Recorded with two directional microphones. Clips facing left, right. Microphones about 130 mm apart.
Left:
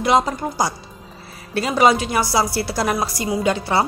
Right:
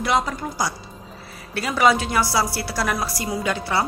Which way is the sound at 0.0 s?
25° left (ahead or behind).